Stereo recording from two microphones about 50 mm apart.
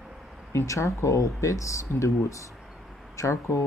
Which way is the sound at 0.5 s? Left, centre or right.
Left.